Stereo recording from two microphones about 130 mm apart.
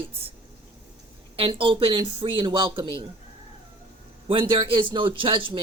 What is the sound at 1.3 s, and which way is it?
A man's voice, 45° right (ahead or behind).